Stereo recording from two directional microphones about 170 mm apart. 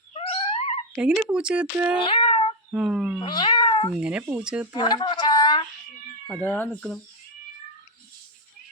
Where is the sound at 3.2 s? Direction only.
25° left (ahead or behind).